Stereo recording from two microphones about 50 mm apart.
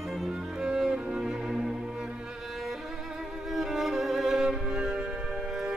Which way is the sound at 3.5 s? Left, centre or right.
Centre.